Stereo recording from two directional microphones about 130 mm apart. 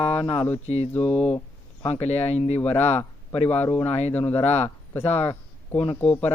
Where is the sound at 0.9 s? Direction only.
10° left (ahead or behind).